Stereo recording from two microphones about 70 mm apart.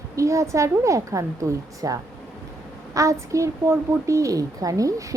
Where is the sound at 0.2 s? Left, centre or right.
Right.